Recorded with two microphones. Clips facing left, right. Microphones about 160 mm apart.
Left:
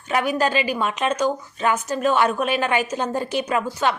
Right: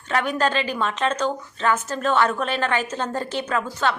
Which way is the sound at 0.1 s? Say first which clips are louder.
Left 1 dB; 10° left (ahead or behind).